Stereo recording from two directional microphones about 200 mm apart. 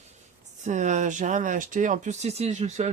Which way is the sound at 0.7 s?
35° right (ahead or behind).